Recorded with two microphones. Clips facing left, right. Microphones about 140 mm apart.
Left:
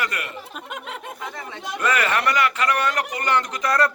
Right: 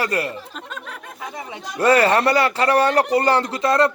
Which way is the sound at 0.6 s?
15° left (ahead or behind).